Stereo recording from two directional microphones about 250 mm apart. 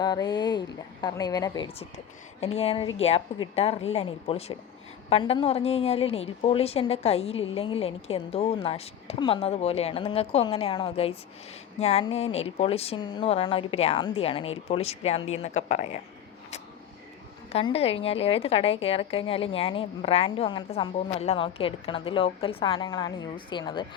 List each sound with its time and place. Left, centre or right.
0.0 s a woman's voice: centre
17.5 s a woman's voice: left